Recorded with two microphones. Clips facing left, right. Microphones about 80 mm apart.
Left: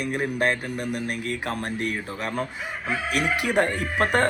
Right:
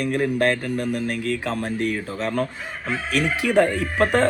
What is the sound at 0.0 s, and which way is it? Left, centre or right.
Speech, centre.